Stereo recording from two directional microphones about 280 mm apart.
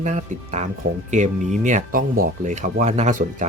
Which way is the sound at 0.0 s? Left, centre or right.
Right.